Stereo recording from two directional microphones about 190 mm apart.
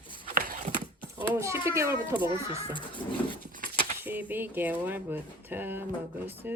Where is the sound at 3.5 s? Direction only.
45° right (ahead or behind).